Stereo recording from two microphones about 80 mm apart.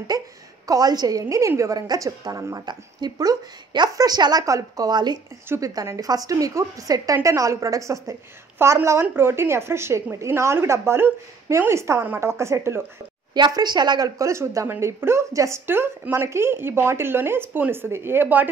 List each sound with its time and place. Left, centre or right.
0.1 s a woman's voice: right
5.6 s a woman's voice: right
13.3 s a woman's voice: right